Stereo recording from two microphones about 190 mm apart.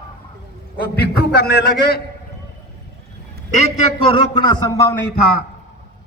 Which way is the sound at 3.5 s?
35° left (ahead or behind).